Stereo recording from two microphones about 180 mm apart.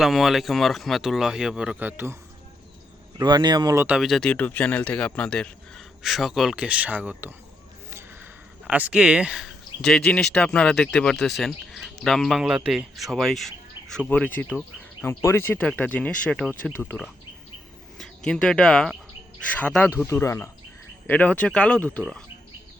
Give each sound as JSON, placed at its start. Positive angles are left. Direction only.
{"t": 0.0, "sound": "speech", "side_deg": 0}
{"t": 3.2, "sound": "speech", "side_deg": -25}
{"t": 3.8, "sound": "speech", "side_deg": 0}